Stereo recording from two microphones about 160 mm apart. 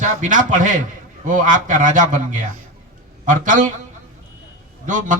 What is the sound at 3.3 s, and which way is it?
Speech, 55° right (ahead or behind).